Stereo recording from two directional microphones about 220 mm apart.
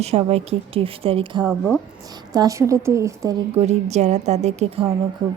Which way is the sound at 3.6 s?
30° right (ahead or behind).